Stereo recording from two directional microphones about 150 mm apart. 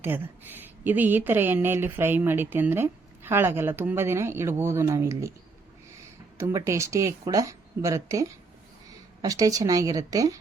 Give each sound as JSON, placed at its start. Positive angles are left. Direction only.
{"t": 0.0, "sound": "speech", "side_deg": -15}
{"t": 6.4, "sound": "speech", "side_deg": -20}